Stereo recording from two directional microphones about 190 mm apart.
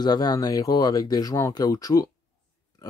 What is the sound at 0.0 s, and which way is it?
Speech, 20° left (ahead or behind).